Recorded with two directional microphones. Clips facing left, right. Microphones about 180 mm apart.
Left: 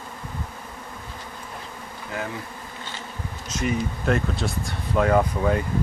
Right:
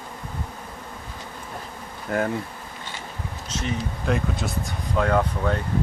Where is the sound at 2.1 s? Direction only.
50° right (ahead or behind).